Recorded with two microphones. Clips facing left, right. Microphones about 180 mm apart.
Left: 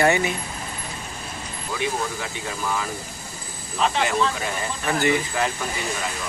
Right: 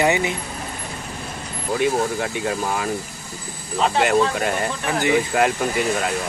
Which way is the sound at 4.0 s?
55° right (ahead or behind).